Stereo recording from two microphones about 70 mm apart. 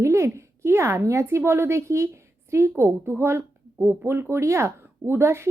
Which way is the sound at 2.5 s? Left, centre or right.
Right.